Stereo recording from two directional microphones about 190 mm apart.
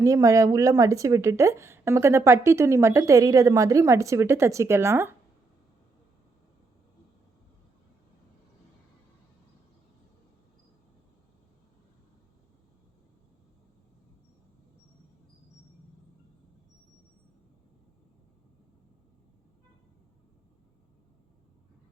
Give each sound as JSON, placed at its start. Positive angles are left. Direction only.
{"t": 0.0, "sound": "a woman's voice", "side_deg": -15}